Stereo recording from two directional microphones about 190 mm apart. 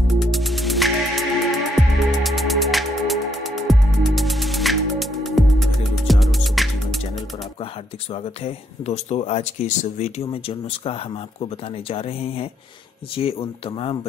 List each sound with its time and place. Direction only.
0.1 s music: centre (ahead or behind)
8.1 s speech: 35° left (ahead or behind)